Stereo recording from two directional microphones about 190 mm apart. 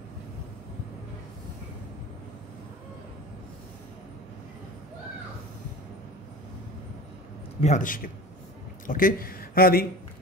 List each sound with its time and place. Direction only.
7.6 s a man's voice: 40° left (ahead or behind)